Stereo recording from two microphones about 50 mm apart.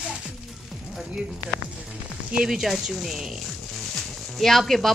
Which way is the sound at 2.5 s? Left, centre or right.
Centre.